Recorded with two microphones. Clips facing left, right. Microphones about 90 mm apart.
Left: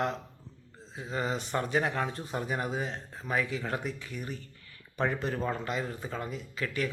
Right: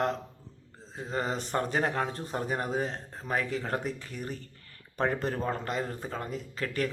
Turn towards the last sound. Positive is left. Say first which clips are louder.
# right 1 dB
turn(degrees=-40)  # may be behind; listen again after turning